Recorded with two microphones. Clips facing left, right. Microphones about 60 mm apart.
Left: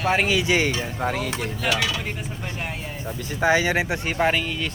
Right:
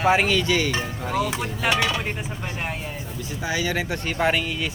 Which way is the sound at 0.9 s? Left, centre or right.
Left.